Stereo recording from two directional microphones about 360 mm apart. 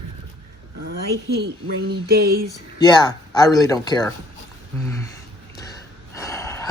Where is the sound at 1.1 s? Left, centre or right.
Right.